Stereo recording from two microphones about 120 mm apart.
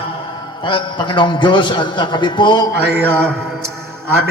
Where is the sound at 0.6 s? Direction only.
40° left (ahead or behind).